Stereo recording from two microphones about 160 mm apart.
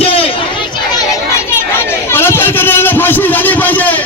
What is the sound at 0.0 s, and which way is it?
Chatter, 35° left (ahead or behind).